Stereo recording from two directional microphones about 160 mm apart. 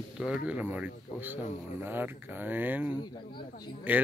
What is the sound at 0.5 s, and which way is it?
Speech, 10° right (ahead or behind).